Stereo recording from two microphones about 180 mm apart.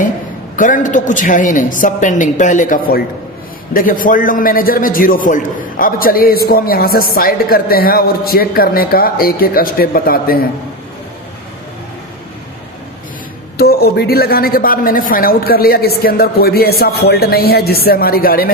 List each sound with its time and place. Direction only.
0.5 s a woman's voice: 45° left (ahead or behind)
13.6 s a woman's voice: 60° left (ahead or behind)